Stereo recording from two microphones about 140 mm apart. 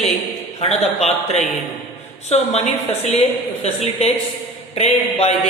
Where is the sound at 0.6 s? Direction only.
50° left (ahead or behind).